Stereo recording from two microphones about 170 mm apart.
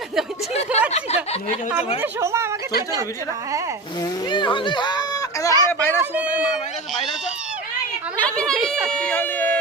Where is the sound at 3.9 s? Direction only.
20° left (ahead or behind).